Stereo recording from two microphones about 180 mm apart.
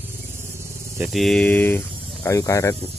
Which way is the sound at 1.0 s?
Centre (ahead or behind).